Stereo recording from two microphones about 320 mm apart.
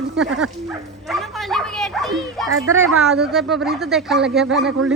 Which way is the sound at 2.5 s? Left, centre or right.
Right.